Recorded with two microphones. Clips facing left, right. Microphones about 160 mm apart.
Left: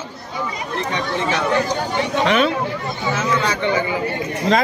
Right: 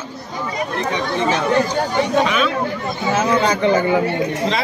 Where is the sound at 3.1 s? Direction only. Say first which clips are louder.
Right 5 dB; 40° right (ahead or behind).